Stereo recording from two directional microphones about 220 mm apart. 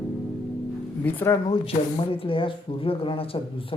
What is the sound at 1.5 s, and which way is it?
Speech, 25° left (ahead or behind).